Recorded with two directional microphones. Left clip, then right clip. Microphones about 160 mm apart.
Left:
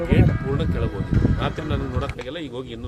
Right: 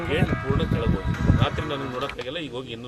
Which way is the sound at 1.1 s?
45° right (ahead or behind).